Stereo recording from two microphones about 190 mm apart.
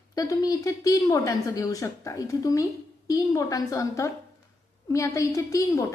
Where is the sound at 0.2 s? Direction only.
20° left (ahead or behind).